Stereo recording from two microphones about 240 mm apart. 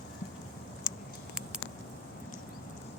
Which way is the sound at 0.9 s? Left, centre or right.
Centre.